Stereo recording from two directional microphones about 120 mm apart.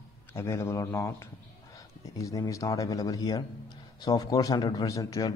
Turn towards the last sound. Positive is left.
turn(degrees=25)  # may be behind; listen again after turning